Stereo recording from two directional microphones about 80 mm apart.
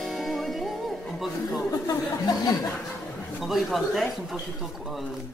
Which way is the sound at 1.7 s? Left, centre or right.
Left.